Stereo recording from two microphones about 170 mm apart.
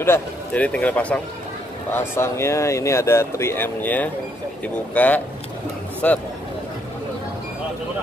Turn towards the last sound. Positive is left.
turn(degrees=10)  # may be behind; listen again after turning